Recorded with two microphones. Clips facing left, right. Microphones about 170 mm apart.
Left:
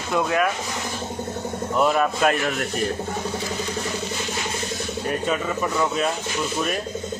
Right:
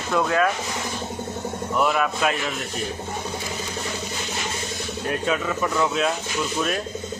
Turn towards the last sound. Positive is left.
turn(degrees=5)  # may be behind; listen again after turning